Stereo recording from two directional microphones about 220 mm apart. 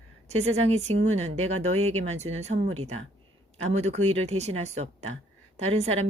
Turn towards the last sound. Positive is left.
turn(degrees=-30)  # may be behind; listen again after turning